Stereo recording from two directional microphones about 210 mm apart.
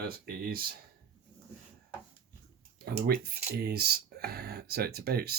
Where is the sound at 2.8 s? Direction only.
45° right (ahead or behind).